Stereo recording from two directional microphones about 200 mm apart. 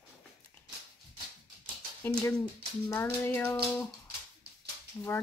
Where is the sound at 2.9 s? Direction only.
10° left (ahead or behind).